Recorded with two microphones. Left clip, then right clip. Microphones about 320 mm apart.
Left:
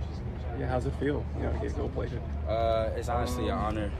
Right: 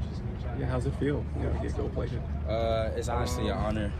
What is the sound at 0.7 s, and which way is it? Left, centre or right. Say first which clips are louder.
Speech: left 1 dB; left.